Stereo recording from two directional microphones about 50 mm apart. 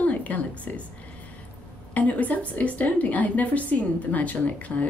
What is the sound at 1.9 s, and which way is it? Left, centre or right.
A woman's voice, left.